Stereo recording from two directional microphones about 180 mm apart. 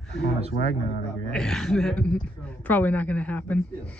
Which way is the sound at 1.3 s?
5° left (ahead or behind).